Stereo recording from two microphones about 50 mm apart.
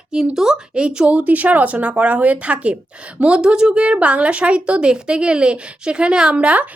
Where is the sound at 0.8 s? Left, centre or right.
Right.